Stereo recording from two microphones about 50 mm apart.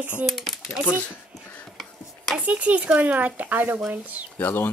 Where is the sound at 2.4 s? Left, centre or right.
Right.